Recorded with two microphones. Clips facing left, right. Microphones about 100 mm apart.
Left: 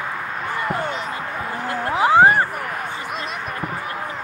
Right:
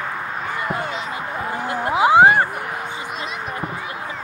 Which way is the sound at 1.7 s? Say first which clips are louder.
Right 1 dB; 15° right (ahead or behind).